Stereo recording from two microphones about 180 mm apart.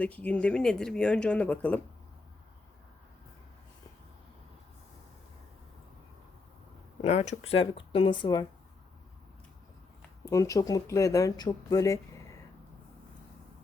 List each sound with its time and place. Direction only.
0.0 s speech: 5° left (ahead or behind)
7.0 s speech: 35° left (ahead or behind)
10.2 s speech: 20° left (ahead or behind)